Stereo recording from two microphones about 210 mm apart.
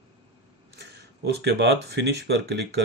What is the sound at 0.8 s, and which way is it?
Speech, 50° right (ahead or behind).